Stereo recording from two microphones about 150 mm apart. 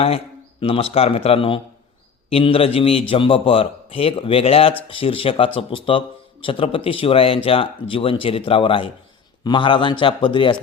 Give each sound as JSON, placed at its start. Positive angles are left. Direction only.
{"t": 0.6, "sound": "speech", "side_deg": 40}